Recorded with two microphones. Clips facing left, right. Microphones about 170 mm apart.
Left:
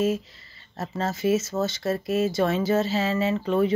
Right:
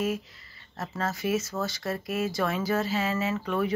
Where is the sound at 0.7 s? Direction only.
25° left (ahead or behind).